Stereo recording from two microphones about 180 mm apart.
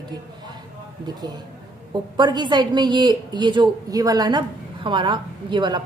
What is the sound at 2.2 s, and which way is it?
A woman's voice, 25° right (ahead or behind).